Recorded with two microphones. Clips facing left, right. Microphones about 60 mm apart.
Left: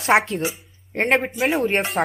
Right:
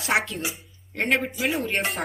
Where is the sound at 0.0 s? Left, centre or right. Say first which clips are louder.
Left 6 dB; left.